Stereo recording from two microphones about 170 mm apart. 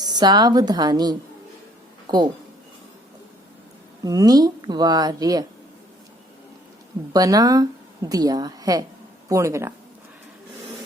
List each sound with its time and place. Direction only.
0.0 s speech: 25° right (ahead or behind)
4.0 s speech: 20° right (ahead or behind)
7.1 s a woman's voice: 20° right (ahead or behind)